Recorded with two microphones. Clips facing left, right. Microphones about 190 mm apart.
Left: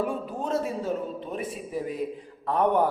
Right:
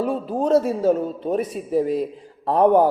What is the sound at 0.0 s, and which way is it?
A woman's voice, 35° right (ahead or behind).